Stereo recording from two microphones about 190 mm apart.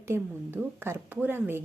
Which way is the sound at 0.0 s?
10° right (ahead or behind).